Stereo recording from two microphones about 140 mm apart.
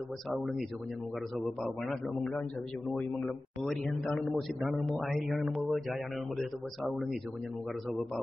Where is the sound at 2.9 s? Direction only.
5° left (ahead or behind).